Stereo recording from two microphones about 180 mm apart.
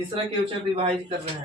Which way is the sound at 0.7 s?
30° right (ahead or behind).